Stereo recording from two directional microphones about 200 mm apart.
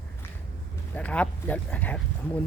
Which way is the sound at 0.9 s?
5° left (ahead or behind).